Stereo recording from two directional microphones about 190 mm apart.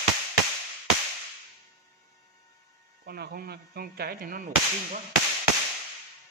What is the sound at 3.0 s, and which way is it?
A man's voice, 55° right (ahead or behind).